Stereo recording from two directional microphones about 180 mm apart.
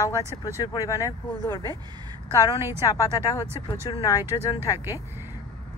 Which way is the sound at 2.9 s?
20° left (ahead or behind).